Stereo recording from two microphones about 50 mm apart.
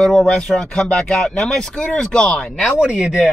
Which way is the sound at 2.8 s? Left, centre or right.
Right.